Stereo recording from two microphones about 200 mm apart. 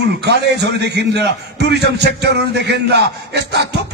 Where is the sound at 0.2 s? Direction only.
60° right (ahead or behind).